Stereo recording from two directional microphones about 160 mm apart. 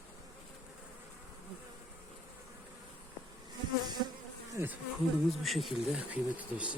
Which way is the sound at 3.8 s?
25° right (ahead or behind).